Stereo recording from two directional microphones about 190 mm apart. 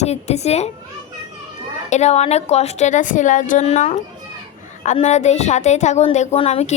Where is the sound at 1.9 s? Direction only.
35° left (ahead or behind).